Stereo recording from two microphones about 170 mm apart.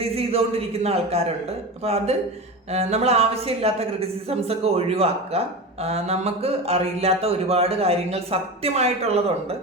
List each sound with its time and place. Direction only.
0.0 s a man's voice: 35° right (ahead or behind)